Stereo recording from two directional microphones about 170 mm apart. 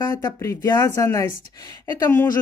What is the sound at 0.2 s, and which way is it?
Speech, 20° left (ahead or behind).